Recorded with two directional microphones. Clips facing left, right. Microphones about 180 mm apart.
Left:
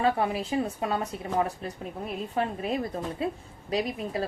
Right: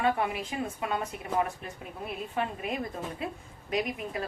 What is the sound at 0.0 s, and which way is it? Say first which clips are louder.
A woman's voice: left 3 dB; 30° left (ahead or behind).